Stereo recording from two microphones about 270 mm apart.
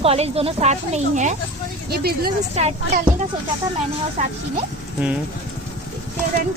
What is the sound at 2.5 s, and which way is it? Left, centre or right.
Speech, right.